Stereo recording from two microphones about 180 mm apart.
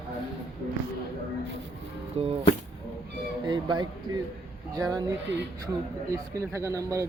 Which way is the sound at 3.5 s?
25° right (ahead or behind).